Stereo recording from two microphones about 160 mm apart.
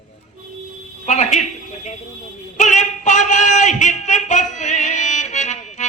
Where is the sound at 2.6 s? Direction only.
50° left (ahead or behind).